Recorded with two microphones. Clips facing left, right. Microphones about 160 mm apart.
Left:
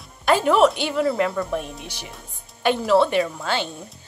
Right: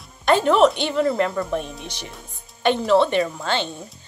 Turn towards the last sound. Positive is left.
turn(degrees=5)  # may be behind; listen again after turning